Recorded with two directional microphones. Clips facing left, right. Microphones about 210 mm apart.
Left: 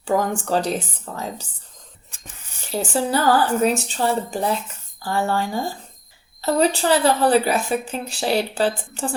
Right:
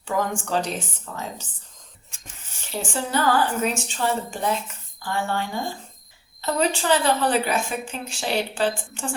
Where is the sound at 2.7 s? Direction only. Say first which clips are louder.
Left 4 dB; 35° left (ahead or behind).